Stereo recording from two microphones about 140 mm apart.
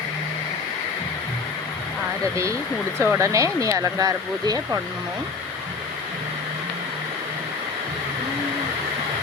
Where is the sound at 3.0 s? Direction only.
20° right (ahead or behind).